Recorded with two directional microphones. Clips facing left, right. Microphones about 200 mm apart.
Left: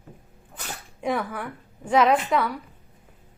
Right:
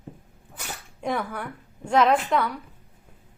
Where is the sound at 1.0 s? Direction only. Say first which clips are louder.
Left 1 dB; 5° left (ahead or behind).